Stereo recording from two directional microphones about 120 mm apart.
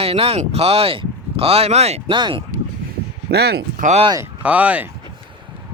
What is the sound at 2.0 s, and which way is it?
Speech, 45° right (ahead or behind).